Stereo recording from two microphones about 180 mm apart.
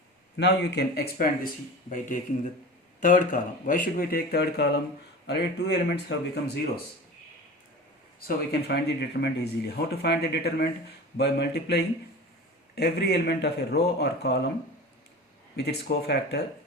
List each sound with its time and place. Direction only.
0.3 s speech: 65° left (ahead or behind)
1.9 s a man's voice: 45° left (ahead or behind); by 6.4 s 65° left (ahead or behind)
8.6 s speech: 65° left (ahead or behind)
15.5 s a man's voice: 65° left (ahead or behind)